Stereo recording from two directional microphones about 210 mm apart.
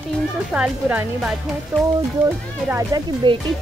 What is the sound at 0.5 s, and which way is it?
Speech, 5° right (ahead or behind).